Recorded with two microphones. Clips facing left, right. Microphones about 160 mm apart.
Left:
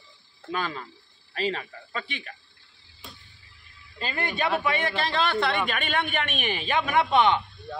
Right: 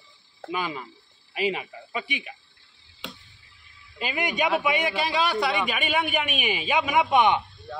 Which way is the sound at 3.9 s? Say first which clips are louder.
Right 3 dB; 15° right (ahead or behind).